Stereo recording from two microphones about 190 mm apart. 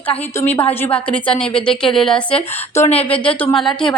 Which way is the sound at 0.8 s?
5° left (ahead or behind).